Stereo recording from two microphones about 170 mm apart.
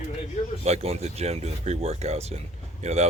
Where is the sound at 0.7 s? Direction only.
40° right (ahead or behind).